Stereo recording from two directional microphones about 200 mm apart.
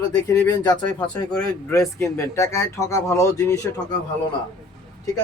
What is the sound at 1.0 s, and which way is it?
Speech, 5° left (ahead or behind).